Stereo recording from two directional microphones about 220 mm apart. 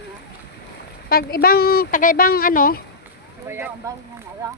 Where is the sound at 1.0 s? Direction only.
45° left (ahead or behind).